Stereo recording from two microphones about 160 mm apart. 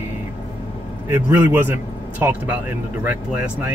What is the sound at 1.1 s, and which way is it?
Speech, 15° right (ahead or behind).